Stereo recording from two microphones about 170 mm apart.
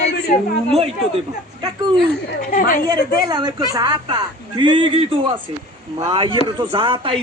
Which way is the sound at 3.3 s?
25° right (ahead or behind).